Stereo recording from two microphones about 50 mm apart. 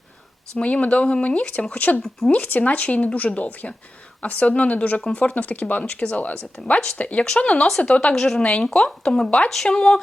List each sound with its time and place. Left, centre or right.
0.6 s speech: left
8.1 s a woman's voice: centre
8.4 s speech: left